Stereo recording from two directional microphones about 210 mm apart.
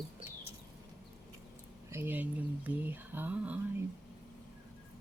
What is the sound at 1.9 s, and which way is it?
Speech, 10° right (ahead or behind).